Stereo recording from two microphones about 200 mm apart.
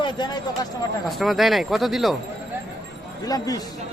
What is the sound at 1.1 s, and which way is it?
Speech, centre (ahead or behind).